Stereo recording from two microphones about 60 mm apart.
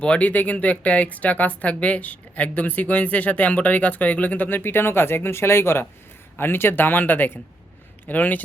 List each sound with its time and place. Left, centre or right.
0.0 s speech: left